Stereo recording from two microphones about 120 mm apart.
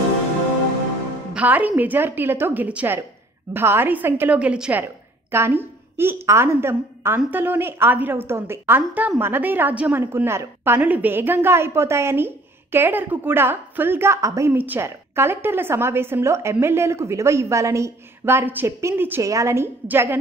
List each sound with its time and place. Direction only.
1.3 s a woman's voice: 15° right (ahead or behind)